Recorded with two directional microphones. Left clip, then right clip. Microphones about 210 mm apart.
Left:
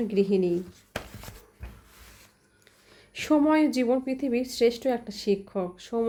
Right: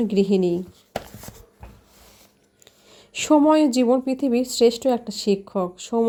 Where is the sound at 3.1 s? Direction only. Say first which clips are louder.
Right 6 dB; 30° right (ahead or behind).